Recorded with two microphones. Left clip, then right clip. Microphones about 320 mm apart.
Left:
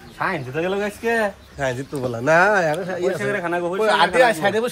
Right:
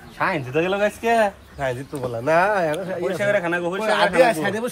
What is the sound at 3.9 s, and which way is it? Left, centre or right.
Speech, left.